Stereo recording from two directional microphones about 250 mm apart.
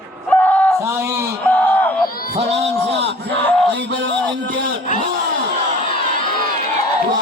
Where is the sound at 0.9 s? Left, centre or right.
Centre.